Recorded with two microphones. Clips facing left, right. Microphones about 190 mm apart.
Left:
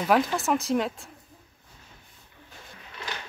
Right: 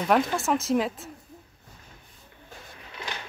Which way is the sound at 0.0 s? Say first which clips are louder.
Even; centre (ahead or behind).